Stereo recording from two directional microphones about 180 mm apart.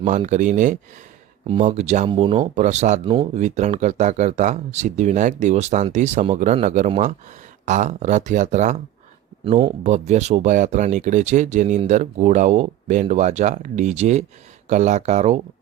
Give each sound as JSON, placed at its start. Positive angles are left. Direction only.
{"t": 0.2, "sound": "speech", "side_deg": -40}
{"t": 9.4, "sound": "speech", "side_deg": -30}
{"t": 9.8, "sound": "speech", "side_deg": -40}